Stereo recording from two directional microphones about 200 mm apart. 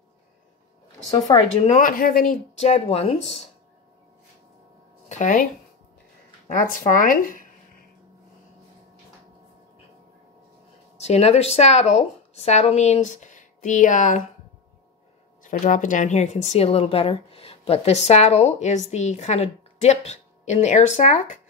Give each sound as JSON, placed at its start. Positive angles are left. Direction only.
{"t": 1.6, "sound": "speech", "side_deg": 40}
{"t": 5.0, "sound": "speech", "side_deg": 40}
{"t": 11.0, "sound": "speech", "side_deg": 35}
{"t": 15.4, "sound": "speech", "side_deg": 40}